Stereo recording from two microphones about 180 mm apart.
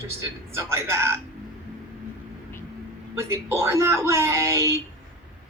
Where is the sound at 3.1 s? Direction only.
15° right (ahead or behind).